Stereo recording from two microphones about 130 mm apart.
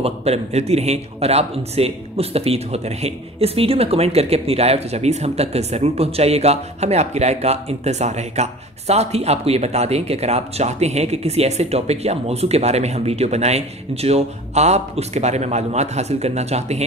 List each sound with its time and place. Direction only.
0.0 s a man's voice: 55° right (ahead or behind)